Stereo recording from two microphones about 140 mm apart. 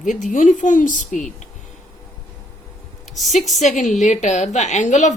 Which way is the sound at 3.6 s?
60° left (ahead or behind).